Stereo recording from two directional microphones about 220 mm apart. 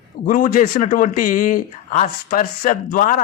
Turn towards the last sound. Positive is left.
turn(degrees=35)  # may be behind; listen again after turning